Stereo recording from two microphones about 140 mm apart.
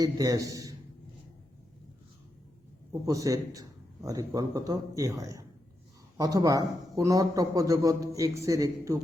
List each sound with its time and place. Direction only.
0.0 s a man's voice: 25° right (ahead or behind)
3.1 s a man's voice: 25° right (ahead or behind)